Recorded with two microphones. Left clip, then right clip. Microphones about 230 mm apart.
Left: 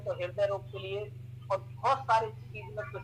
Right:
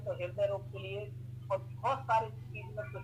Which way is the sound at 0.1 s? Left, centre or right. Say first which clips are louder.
Left 3 dB; left.